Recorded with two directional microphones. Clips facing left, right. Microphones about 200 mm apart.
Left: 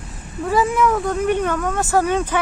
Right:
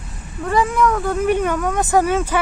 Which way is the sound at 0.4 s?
5° left (ahead or behind).